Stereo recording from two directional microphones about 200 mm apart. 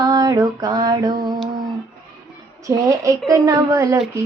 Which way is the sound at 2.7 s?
15° right (ahead or behind).